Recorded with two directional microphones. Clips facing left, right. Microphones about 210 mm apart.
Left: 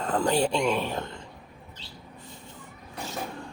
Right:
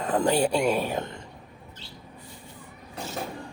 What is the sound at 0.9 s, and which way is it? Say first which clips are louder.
Speech: right 2 dB; 20° right (ahead or behind).